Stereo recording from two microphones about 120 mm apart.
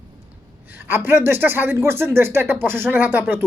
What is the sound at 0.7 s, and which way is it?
Speech, 20° right (ahead or behind).